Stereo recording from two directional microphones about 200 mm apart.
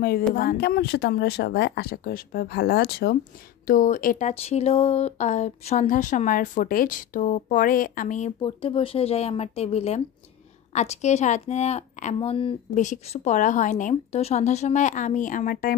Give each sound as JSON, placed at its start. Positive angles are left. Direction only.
{"t": 0.0, "sound": "speech", "side_deg": 45}
{"t": 8.4, "sound": "speech", "side_deg": 30}
{"t": 12.7, "sound": "speech", "side_deg": 40}